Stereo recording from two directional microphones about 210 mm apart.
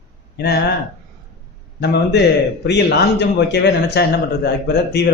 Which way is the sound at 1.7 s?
55° left (ahead or behind).